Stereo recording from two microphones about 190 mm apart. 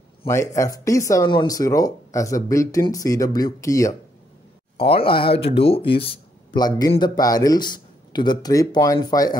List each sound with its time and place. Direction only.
0.3 s speech: 15° left (ahead or behind)
4.9 s speech: 30° left (ahead or behind)